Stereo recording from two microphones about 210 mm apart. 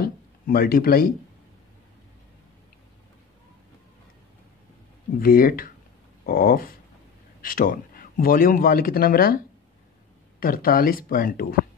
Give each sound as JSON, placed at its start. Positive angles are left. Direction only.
{"t": 0.0, "sound": "a sound", "side_deg": 45}
{"t": 5.2, "sound": "speech", "side_deg": 45}
{"t": 10.4, "sound": "speech", "side_deg": 45}